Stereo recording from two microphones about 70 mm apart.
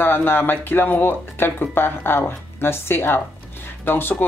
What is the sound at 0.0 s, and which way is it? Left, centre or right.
Speech, left.